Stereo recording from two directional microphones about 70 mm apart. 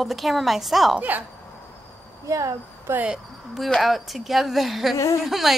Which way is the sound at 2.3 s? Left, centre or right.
Right.